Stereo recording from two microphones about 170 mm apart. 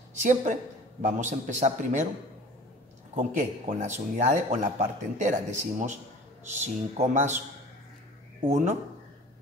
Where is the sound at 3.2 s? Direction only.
50° right (ahead or behind).